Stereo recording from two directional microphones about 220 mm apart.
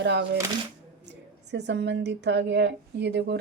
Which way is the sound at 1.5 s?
50° right (ahead or behind).